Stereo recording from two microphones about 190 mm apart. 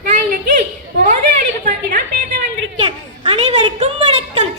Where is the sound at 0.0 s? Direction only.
45° right (ahead or behind).